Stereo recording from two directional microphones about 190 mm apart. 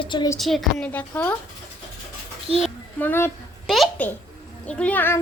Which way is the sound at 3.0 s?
10° left (ahead or behind).